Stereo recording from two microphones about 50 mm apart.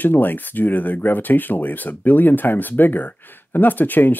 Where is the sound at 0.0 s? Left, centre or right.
Left.